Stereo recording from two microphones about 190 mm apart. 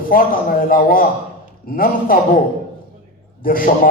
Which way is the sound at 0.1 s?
50° left (ahead or behind).